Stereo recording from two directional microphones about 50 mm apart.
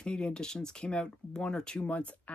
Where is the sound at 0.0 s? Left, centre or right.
Centre.